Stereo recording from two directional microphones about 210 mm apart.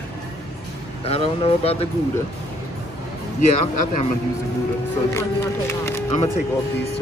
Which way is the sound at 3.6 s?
35° left (ahead or behind).